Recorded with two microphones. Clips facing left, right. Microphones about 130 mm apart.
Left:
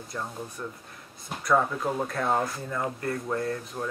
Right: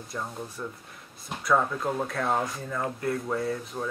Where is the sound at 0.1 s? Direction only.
Centre (ahead or behind).